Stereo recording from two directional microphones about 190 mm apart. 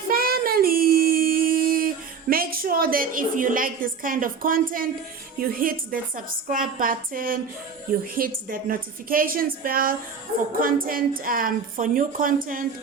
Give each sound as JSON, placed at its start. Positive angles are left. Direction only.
{"t": 0.1, "sound": "child singing", "side_deg": -50}
{"t": 2.3, "sound": "a woman's voice", "side_deg": -50}